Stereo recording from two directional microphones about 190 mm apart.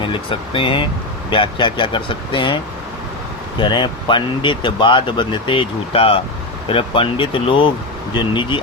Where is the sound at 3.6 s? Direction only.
25° left (ahead or behind).